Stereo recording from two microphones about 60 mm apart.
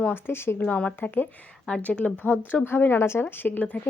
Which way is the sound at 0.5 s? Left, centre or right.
Left.